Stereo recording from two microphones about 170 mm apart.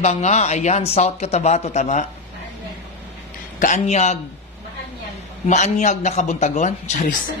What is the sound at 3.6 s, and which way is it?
Speech, 45° left (ahead or behind).